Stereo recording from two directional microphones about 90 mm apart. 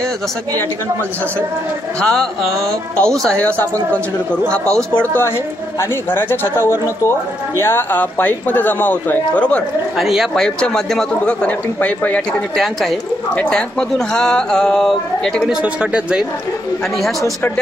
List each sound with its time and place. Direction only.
2.0 s speech: 10° left (ahead or behind)
5.8 s speech: 25° left (ahead or behind)
9.9 s a man's voice: centre (ahead or behind)
11.4 s speech: 20° left (ahead or behind)
13.3 s speech: 10° left (ahead or behind)
15.6 s speech: 10° right (ahead or behind)